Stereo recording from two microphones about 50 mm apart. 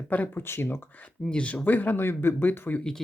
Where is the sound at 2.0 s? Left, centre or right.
Left.